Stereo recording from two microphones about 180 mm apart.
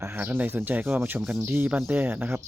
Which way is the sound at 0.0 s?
10° right (ahead or behind).